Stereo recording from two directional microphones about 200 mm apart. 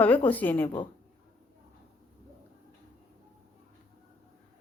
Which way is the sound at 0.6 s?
25° left (ahead or behind).